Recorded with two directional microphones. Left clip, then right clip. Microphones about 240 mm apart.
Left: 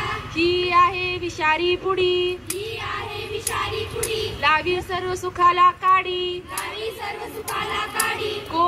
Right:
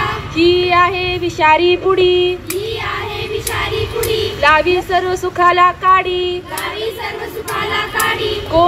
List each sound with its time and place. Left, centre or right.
0.4 s speech: left
4.2 s speech: left